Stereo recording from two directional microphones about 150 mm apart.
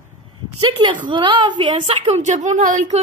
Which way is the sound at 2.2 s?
55° right (ahead or behind).